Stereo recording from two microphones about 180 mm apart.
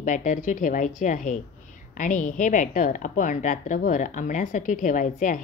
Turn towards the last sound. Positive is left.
turn(degrees=45)  # may be behind; listen again after turning